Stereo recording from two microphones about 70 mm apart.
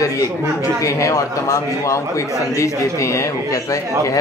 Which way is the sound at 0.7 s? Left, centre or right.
Left.